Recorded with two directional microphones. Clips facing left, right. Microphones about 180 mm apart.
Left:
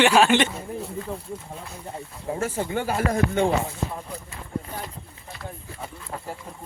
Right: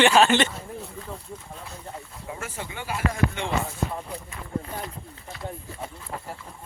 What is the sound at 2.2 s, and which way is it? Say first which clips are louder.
Speech: left 10 dB; 35° left (ahead or behind).